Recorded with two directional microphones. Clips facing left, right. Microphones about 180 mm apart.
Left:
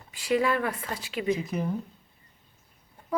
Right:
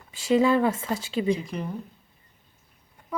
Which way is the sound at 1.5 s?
5° left (ahead or behind).